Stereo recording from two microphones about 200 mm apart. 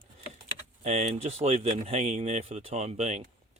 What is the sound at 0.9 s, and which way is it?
Speech, 30° right (ahead or behind).